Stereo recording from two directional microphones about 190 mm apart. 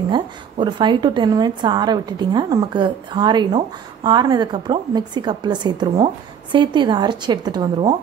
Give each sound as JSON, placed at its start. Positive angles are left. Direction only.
{"t": 0.1, "sound": "a woman's voice", "side_deg": -25}